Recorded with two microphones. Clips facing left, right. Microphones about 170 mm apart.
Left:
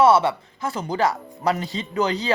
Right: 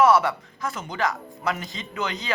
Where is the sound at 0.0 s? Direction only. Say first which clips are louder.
Left 2 dB; 25° left (ahead or behind).